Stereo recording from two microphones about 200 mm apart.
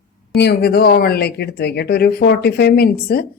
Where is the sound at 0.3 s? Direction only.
55° left (ahead or behind).